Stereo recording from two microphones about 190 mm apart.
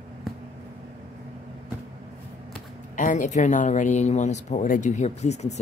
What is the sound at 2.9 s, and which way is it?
Speech, 40° left (ahead or behind).